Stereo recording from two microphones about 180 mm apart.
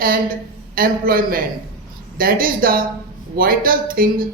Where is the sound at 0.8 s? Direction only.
55° right (ahead or behind).